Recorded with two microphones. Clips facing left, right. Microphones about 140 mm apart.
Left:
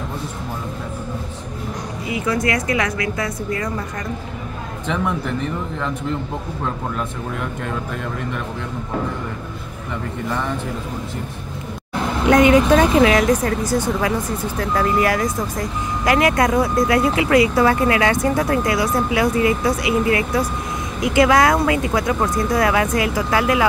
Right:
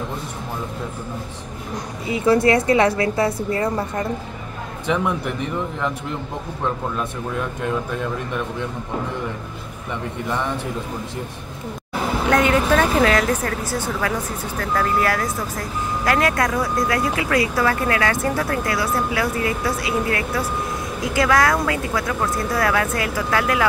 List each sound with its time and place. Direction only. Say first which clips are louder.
2.0 s a woman's voice: right 5 dB; 30° right (ahead or behind)
11.9 s a sound: left 1 dB; 5° right (ahead or behind)
12.3 s speech: left 5 dB; 10° left (ahead or behind)
12.8 s speech: left 3 dB; centre (ahead or behind)
13.1 s speech: left 3 dB; 10° left (ahead or behind)